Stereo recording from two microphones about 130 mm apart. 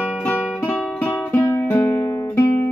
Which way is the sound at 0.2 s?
15° left (ahead or behind).